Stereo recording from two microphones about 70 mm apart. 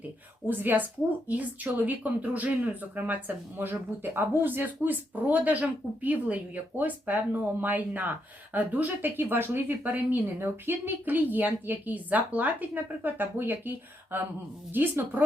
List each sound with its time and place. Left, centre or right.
0.4 s speech: right